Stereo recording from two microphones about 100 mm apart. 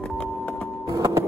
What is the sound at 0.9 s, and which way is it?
Music, 30° right (ahead or behind).